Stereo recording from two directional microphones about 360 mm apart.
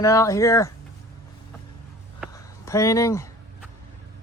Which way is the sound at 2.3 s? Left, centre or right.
Centre.